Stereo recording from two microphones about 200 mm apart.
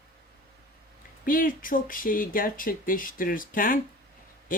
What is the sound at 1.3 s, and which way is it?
Speech, 45° left (ahead or behind).